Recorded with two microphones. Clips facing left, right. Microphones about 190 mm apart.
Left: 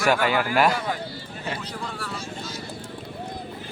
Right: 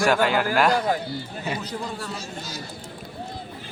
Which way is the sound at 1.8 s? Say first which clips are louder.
Right 2 dB; 25° right (ahead or behind).